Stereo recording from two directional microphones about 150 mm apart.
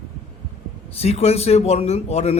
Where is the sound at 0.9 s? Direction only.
45° left (ahead or behind).